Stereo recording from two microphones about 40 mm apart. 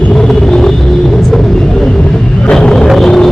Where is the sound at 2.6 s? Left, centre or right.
Centre.